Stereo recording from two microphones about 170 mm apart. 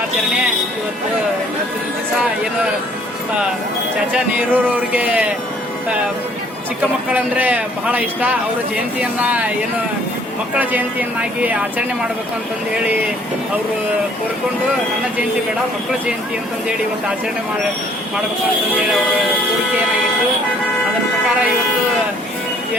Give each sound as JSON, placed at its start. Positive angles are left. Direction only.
{"t": 4.1, "sound": "a man's voice", "side_deg": -10}
{"t": 7.1, "sound": "a man's voice", "side_deg": -10}
{"t": 10.5, "sound": "a man's voice", "side_deg": -10}